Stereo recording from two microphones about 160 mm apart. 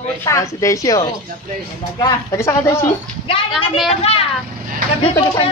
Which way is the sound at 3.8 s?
40° left (ahead or behind).